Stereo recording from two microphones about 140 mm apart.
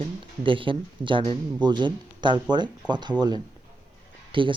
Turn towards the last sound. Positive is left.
turn(degrees=-35)  # may be behind; listen again after turning